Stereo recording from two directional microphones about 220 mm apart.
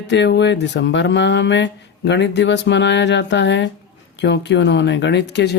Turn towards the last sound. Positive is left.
turn(degrees=50)  # may be behind; listen again after turning